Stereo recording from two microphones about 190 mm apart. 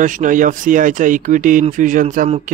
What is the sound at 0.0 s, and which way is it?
Speech, 40° right (ahead or behind).